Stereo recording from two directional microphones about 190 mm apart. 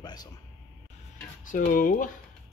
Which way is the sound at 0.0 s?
20° left (ahead or behind).